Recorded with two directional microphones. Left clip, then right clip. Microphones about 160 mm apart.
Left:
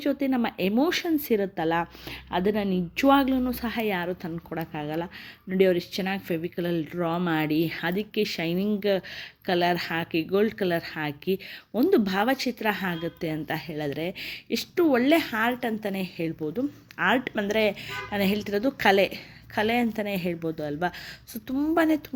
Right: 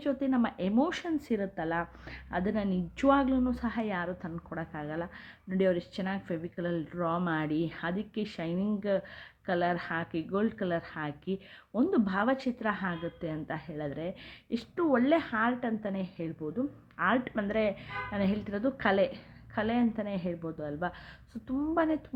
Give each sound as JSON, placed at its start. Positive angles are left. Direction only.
{"t": 0.0, "sound": "a woman's voice", "side_deg": 10}